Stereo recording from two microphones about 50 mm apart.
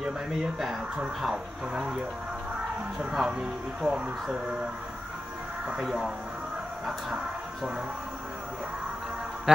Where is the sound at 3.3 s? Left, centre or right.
Centre.